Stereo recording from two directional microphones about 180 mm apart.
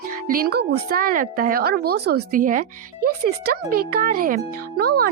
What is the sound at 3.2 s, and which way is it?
A child's voice, 60° right (ahead or behind).